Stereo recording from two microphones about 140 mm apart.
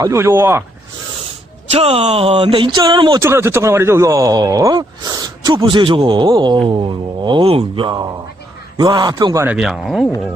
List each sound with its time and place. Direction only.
0.0 s speech: 20° right (ahead or behind)
1.7 s speech: 45° right (ahead or behind)
3.2 s speech: 20° right (ahead or behind)
9.4 s speech: 10° right (ahead or behind)